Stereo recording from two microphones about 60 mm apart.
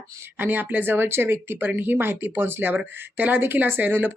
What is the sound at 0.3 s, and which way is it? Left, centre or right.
Speech, right.